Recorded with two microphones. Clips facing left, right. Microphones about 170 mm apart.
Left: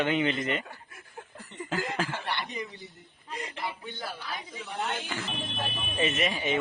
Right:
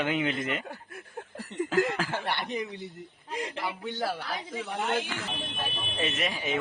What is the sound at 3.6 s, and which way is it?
Speech, 75° right (ahead or behind).